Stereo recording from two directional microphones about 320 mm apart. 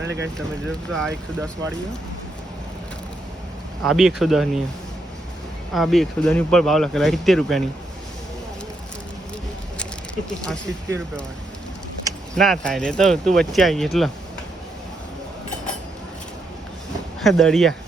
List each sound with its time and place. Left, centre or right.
0.0 s a sound: right
0.3 s speech: centre
3.8 s speech: centre
5.7 s speech: centre
10.4 s speech: centre
12.3 s speech: centre
17.2 s speech: centre